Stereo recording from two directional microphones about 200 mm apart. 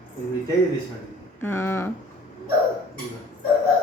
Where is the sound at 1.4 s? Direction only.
10° left (ahead or behind).